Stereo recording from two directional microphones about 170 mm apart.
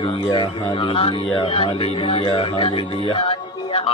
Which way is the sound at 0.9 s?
30° left (ahead or behind).